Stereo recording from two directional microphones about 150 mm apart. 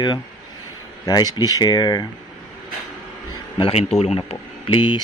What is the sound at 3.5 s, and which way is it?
Speech, 40° left (ahead or behind).